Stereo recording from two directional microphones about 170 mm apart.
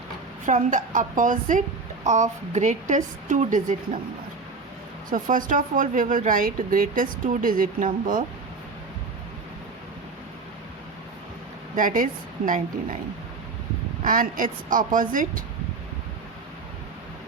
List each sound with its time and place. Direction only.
0.4 s speech: 50° right (ahead or behind)
5.0 s speech: 50° right (ahead or behind)
11.8 s speech: 50° right (ahead or behind)
14.0 s speech: 50° right (ahead or behind)